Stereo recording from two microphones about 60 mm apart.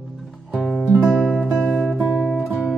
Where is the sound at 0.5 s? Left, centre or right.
Centre.